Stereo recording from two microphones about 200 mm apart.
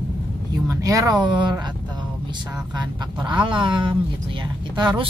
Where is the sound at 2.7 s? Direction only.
20° right (ahead or behind).